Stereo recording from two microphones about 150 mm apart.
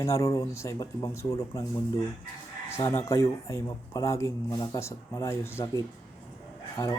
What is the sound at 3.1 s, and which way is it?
Speech, 20° left (ahead or behind).